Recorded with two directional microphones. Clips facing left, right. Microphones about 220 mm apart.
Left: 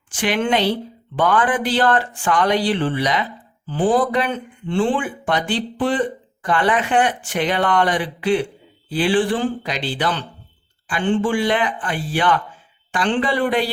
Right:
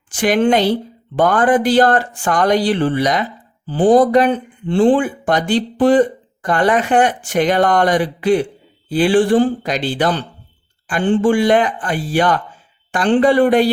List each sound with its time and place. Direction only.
0.1 s speech: 40° right (ahead or behind)